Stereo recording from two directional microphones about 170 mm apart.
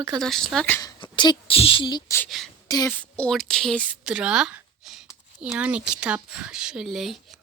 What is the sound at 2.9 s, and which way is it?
A woman's voice, 5° left (ahead or behind).